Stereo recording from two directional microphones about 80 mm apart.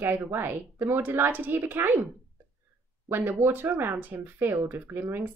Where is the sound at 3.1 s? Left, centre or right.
Right.